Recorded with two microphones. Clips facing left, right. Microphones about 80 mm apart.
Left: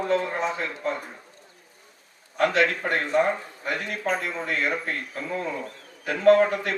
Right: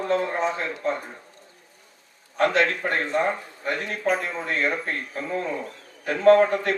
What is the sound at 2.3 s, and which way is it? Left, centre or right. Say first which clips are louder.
A man's voice: right 1 dB; right.